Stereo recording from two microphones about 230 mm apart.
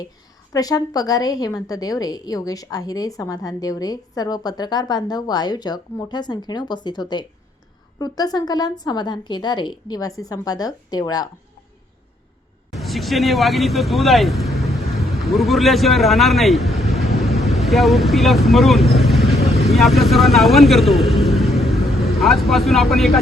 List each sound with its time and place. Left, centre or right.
0.5 s a woman's voice: centre
12.7 s speech: centre